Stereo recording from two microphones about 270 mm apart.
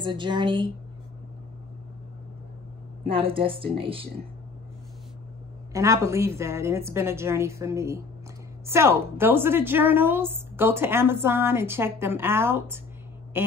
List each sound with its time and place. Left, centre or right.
0.0 s a woman's voice: centre
3.1 s speech: centre
5.7 s a woman's voice: centre